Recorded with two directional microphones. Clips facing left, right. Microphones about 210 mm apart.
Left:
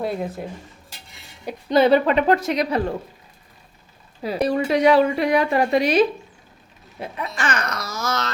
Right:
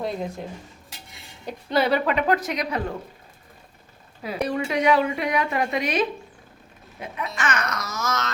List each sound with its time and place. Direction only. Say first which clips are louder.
0.0 s speech: left 3 dB; 5° left (ahead or behind)
1.7 s a woman's voice: left 6 dB; 25° left (ahead or behind)
4.2 s a woman's voice: left 5 dB; 30° left (ahead or behind)